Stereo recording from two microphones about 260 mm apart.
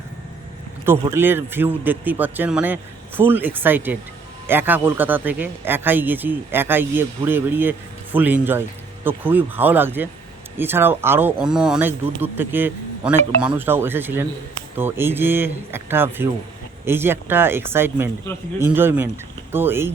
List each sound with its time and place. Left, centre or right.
0.9 s speech: centre